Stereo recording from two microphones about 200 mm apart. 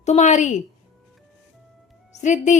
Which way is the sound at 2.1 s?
35° left (ahead or behind).